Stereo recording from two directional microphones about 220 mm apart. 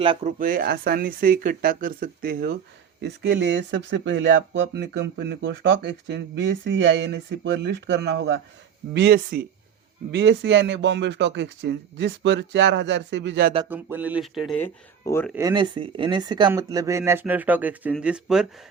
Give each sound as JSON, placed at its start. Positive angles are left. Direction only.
{"t": 0.0, "sound": "speech", "side_deg": -25}
{"t": 13.7, "sound": "speech", "side_deg": -10}
{"t": 15.4, "sound": "speech", "side_deg": -20}